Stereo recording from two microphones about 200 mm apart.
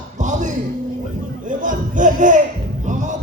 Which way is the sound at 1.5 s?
40° right (ahead or behind).